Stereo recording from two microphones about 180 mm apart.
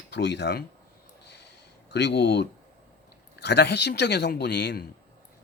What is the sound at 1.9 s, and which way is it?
Speech, 70° left (ahead or behind).